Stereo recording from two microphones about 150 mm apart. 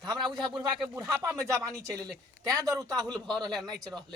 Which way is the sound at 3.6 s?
25° right (ahead or behind).